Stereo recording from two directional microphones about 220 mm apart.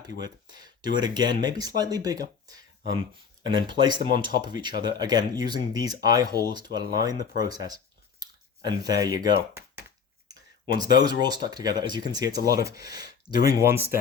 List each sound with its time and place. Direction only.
0.2 s speech: 20° right (ahead or behind)
8.2 s a sound: 15° right (ahead or behind)
10.8 s speech: 20° right (ahead or behind)